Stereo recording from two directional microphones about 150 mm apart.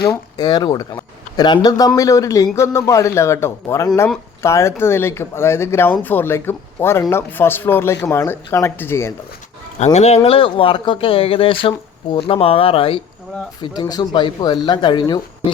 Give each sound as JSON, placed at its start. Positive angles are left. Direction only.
{"t": 0.3, "sound": "speech", "side_deg": 25}
{"t": 9.7, "sound": "speech", "side_deg": 50}
{"t": 10.2, "sound": "speech", "side_deg": 40}
{"t": 13.6, "sound": "speech", "side_deg": 25}